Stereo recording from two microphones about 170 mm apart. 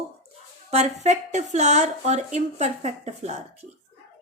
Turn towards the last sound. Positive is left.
turn(degrees=-40)  # may be behind; listen again after turning